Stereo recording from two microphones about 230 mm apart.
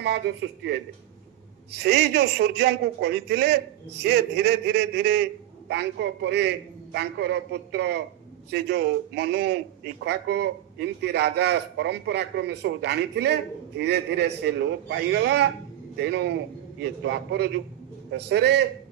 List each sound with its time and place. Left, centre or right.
0.0 s a man's voice: right